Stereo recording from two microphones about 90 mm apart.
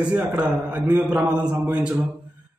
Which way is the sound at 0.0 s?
15° right (ahead or behind).